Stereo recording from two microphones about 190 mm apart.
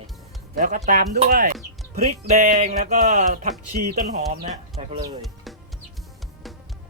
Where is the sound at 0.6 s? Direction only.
45° right (ahead or behind).